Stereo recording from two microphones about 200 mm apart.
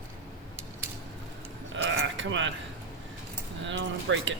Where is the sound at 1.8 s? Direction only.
70° right (ahead or behind).